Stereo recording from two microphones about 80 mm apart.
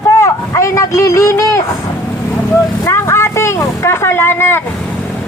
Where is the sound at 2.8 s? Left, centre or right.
Left.